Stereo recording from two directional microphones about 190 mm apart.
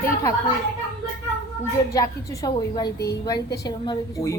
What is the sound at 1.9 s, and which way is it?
A woman's voice, 20° left (ahead or behind).